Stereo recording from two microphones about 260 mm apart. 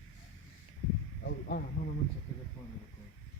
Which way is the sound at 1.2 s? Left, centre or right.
Left.